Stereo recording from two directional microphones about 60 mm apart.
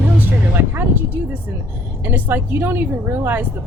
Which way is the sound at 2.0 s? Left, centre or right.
Right.